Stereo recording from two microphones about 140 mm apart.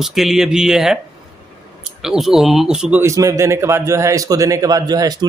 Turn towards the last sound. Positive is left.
turn(degrees=-30)  # may be behind; listen again after turning